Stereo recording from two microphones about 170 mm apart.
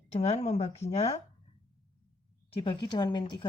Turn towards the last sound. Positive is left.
turn(degrees=30)  # may be behind; listen again after turning